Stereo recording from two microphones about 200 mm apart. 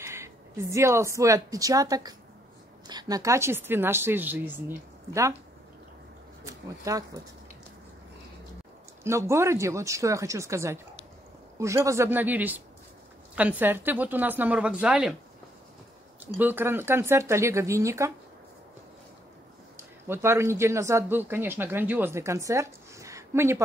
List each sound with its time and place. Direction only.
0.0 s speech: 15° right (ahead or behind)
6.4 s speech: 15° right (ahead or behind)
9.0 s speech: 15° right (ahead or behind)
16.3 s speech: 10° right (ahead or behind)
20.1 s speech: 15° right (ahead or behind)